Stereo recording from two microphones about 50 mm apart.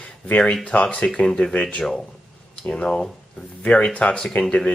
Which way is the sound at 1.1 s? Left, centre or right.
Centre.